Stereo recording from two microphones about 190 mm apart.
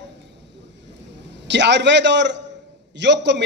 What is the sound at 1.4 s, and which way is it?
A man's voice, 65° right (ahead or behind).